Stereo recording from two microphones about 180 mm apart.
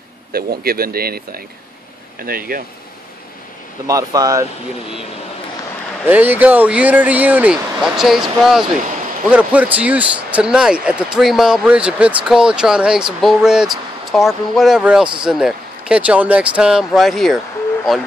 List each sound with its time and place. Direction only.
0.3 s speech: 55° right (ahead or behind)
3.8 s speech: 20° right (ahead or behind)
6.0 s speech: 10° right (ahead or behind)